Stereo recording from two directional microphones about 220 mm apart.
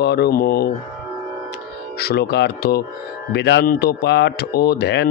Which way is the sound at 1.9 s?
45° left (ahead or behind).